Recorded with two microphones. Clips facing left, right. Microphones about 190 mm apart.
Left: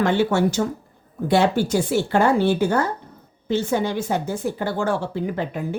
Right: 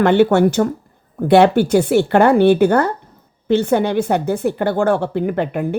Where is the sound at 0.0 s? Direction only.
60° right (ahead or behind).